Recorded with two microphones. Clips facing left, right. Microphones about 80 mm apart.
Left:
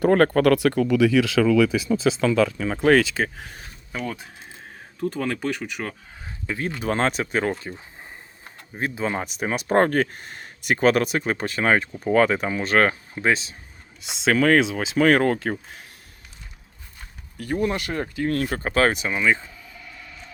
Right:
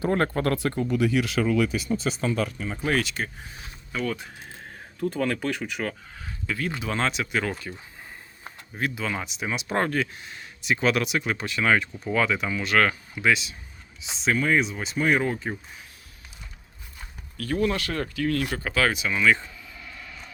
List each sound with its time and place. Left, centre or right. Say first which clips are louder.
0.0 s speech: left 7 dB; left
3.9 s speech: right 1 dB; centre
4.9 s speech: even; centre
6.2 s a sound: left 1 dB; left
6.7 s speech: left 6 dB; left
8.8 s speech: left 3 dB; left
14.0 s speech: left 5 dB; left
17.3 s speech: left 1 dB; centre; by 19.1 s left
19.1 s speech: even; centre